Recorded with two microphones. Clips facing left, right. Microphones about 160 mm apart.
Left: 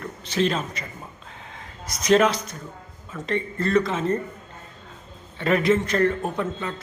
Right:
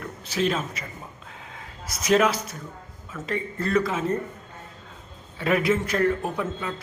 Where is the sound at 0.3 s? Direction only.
5° right (ahead or behind).